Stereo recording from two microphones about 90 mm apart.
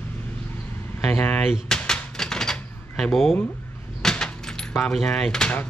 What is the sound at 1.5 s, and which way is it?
Typewriter, 5° left (ahead or behind).